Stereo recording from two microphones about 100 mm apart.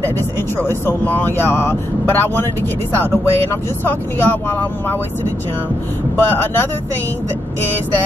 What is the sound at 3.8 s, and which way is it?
Speech, 20° left (ahead or behind).